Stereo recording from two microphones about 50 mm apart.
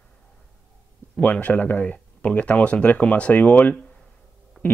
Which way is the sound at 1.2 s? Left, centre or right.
Left.